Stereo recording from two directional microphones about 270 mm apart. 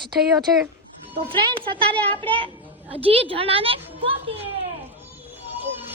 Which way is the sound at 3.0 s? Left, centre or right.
Right.